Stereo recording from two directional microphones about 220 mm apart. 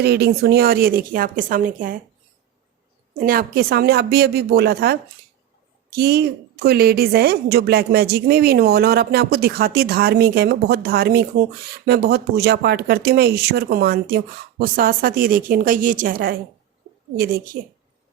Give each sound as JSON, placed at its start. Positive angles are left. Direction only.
{"t": 0.0, "sound": "a woman's voice", "side_deg": -45}
{"t": 3.2, "sound": "a woman's voice", "side_deg": -40}